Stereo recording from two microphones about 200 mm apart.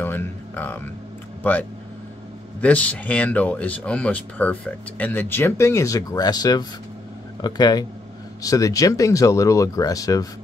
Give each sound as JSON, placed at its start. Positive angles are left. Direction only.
{"t": 0.0, "sound": "speech", "side_deg": 10}